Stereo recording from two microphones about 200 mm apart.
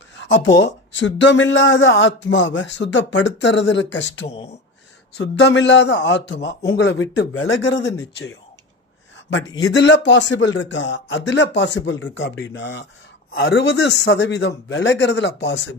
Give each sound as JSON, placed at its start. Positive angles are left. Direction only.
{"t": 0.2, "sound": "speech", "side_deg": 70}
{"t": 5.2, "sound": "speech", "side_deg": 70}
{"t": 9.1, "sound": "a sound", "side_deg": 65}
{"t": 9.5, "sound": "speech", "side_deg": 20}
{"t": 9.7, "sound": "speech", "side_deg": 65}